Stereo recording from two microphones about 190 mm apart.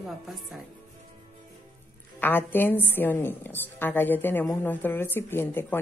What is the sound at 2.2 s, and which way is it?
A woman's voice, 10° left (ahead or behind).